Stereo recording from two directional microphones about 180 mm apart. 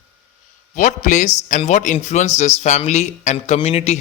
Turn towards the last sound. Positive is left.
turn(degrees=35)  # may be behind; listen again after turning